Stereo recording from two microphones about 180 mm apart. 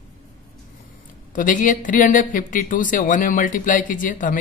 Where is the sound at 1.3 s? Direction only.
45° left (ahead or behind).